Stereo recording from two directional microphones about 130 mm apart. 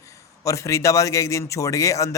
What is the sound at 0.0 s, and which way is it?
A man's voice, 25° left (ahead or behind).